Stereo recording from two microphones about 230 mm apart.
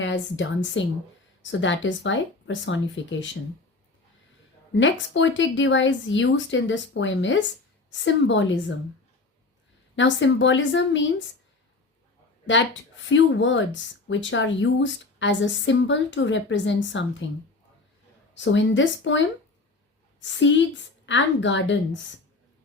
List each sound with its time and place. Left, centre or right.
0.0 s a woman's voice: left
4.7 s a woman's voice: left
9.9 s a woman's voice: left
13.1 s a woman's voice: left
18.3 s a woman's voice: left
20.2 s a woman's voice: left